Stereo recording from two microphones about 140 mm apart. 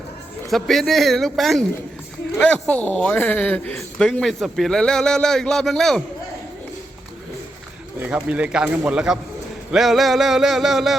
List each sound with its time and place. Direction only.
0.5 s speech: centre (ahead or behind)
7.9 s speech: 10° right (ahead or behind)